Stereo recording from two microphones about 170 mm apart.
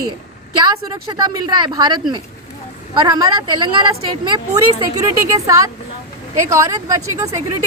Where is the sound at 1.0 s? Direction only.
20° right (ahead or behind).